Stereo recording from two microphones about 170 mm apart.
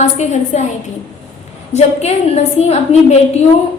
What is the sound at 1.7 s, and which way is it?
A woman's voice, 40° left (ahead or behind).